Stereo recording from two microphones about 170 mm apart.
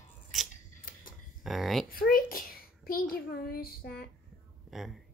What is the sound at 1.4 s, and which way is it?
Speech, centre (ahead or behind).